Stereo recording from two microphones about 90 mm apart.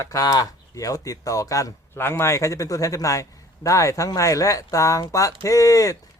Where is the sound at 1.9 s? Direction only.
25° left (ahead or behind).